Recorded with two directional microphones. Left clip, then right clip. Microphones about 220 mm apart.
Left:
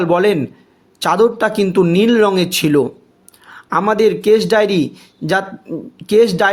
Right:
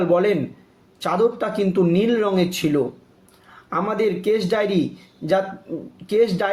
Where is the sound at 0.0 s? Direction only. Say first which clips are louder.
Left 5 dB; 50° left (ahead or behind).